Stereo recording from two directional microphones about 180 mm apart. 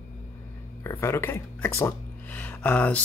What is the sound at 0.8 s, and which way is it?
Speech, 15° left (ahead or behind).